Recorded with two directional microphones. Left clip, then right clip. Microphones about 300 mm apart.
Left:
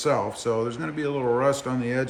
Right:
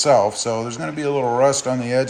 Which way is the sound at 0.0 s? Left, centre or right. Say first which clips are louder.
Right 9 dB; centre.